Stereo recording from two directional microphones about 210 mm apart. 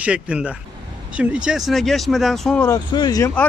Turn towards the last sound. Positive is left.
turn(degrees=20)  # may be behind; listen again after turning